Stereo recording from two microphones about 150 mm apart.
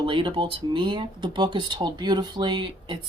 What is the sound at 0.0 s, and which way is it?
Speech, 35° right (ahead or behind).